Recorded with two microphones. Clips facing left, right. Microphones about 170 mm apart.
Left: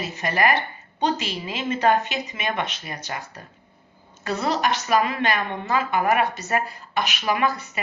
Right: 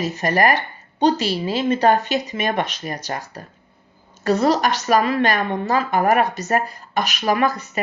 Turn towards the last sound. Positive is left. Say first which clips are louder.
# right 4 dB
turn(degrees=-40)  # may be behind; listen again after turning